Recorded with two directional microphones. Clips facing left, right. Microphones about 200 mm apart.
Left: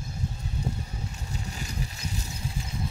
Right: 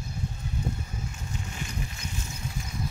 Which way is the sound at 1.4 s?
35° left (ahead or behind).